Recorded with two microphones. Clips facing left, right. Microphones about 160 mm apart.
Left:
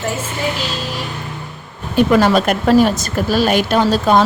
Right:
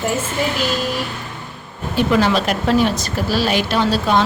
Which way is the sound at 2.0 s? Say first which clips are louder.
Left 4 dB; 50° left (ahead or behind).